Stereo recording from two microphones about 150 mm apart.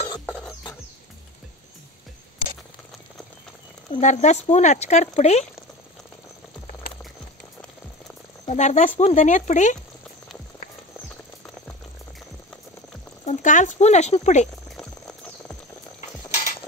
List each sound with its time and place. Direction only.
0.3 s music: 10° left (ahead or behind)
3.9 s speech: 50° left (ahead or behind)
8.5 s speech: 50° left (ahead or behind)
13.2 s speech: 55° left (ahead or behind)